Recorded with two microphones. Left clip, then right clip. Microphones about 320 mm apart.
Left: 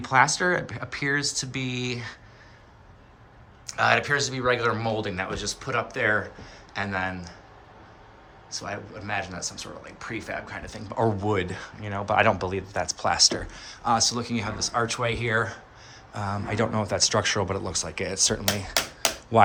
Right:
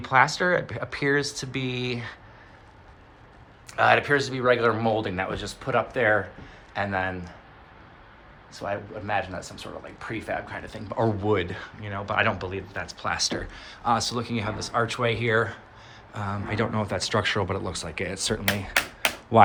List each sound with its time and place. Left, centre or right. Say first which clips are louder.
0.0 s speech: even; centre
3.7 s speech: right 2 dB; centre
8.4 s speech: right 3 dB; centre